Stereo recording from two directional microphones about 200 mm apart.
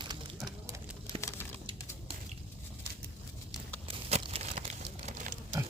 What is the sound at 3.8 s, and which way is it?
Crumpling, 30° right (ahead or behind).